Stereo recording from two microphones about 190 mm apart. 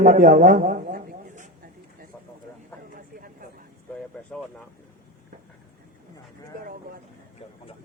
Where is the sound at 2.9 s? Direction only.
45° right (ahead or behind).